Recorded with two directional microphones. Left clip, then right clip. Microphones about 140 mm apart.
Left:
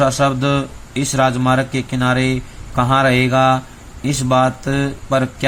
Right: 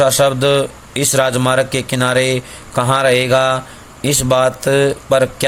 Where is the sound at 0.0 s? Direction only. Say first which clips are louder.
Right 3 dB; 50° right (ahead or behind).